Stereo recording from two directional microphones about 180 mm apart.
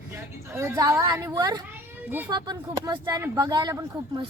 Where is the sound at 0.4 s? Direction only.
15° right (ahead or behind).